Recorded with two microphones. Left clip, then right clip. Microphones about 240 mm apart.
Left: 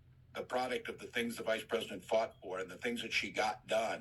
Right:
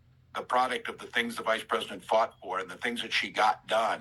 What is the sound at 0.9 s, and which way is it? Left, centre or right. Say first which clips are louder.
Speech: right 8 dB; right.